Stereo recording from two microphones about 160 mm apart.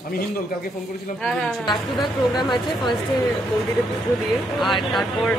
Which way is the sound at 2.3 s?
30° left (ahead or behind).